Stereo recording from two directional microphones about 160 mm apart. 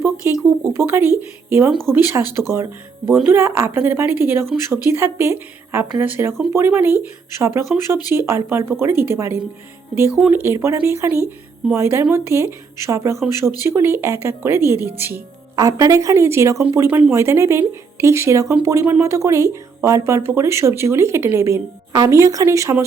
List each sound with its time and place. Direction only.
0.2 s speech: 15° right (ahead or behind)
10.4 s speech: 15° right (ahead or behind)